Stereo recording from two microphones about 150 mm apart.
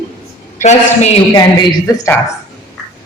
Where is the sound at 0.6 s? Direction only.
50° left (ahead or behind).